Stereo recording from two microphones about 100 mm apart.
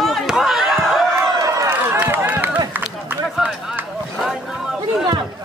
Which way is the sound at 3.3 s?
5° right (ahead or behind).